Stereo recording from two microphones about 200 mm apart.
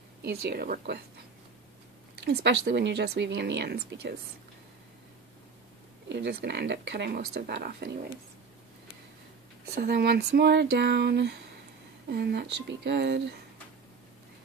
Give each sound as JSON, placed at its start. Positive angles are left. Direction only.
{"t": 0.2, "sound": "speech", "side_deg": -55}
{"t": 2.2, "sound": "speech", "side_deg": -55}
{"t": 6.0, "sound": "speech", "side_deg": -55}
{"t": 9.8, "sound": "speech", "side_deg": -50}